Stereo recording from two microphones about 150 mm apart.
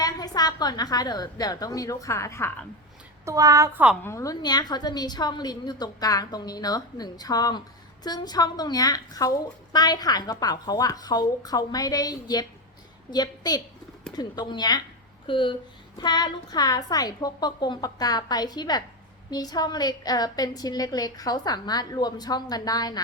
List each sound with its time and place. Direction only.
0.0 s a woman's voice: 25° left (ahead or behind)
3.2 s a woman's voice: 20° right (ahead or behind)
4.0 s a woman's voice: 20° left (ahead or behind)